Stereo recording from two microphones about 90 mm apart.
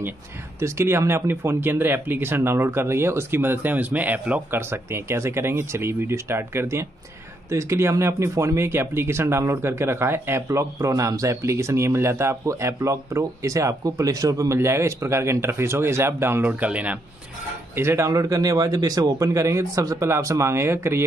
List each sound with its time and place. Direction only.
0.6 s speech: 30° right (ahead or behind); by 17.0 s 15° right (ahead or behind)
17.7 s speech: 30° right (ahead or behind)